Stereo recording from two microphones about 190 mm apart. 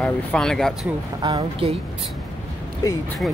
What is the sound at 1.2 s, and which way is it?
Speech, 25° right (ahead or behind).